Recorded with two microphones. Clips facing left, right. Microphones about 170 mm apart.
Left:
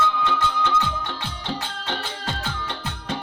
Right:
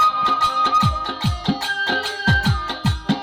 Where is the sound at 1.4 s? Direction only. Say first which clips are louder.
Right 6 dB; 90° right.